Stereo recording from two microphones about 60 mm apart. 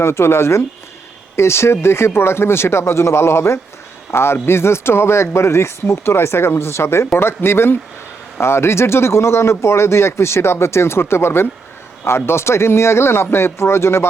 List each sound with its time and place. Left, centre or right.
0.0 s speech: left